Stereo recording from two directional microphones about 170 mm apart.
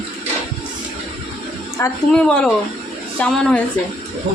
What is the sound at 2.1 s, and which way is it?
Speech, 5° left (ahead or behind).